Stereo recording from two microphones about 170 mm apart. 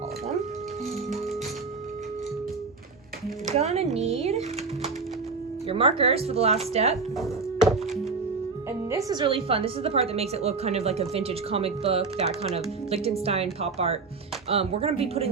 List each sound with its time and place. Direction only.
3.5 s a woman's voice: 40° right (ahead or behind)
8.9 s a woman's voice: 20° right (ahead or behind); by 15.3 s 35° right (ahead or behind)